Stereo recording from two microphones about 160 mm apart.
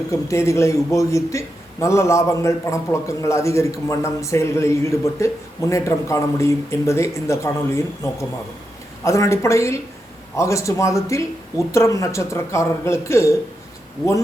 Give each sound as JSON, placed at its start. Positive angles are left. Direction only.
{"t": 0.1, "sound": "a man's voice", "side_deg": 20}